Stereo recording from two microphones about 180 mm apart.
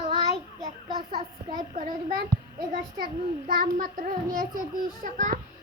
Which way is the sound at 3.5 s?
50° right (ahead or behind).